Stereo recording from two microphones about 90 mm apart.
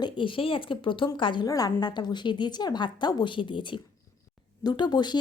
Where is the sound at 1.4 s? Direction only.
45° left (ahead or behind); by 3.8 s 65° left (ahead or behind).